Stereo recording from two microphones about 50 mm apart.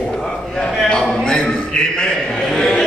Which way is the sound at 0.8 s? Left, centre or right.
Centre.